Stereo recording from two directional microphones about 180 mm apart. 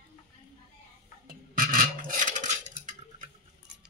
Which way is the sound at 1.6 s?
50° right (ahead or behind).